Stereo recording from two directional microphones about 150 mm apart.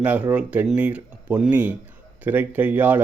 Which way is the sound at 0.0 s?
10° right (ahead or behind).